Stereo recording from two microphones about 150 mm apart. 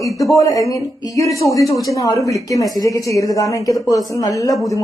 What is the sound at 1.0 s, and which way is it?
A woman's voice, 20° left (ahead or behind).